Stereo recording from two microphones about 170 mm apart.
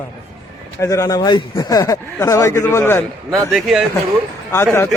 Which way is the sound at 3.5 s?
Centre (ahead or behind).